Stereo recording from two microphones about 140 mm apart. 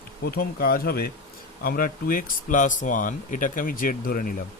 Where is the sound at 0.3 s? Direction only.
90° left.